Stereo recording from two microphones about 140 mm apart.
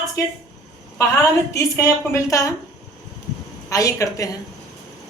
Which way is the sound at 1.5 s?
20° left (ahead or behind).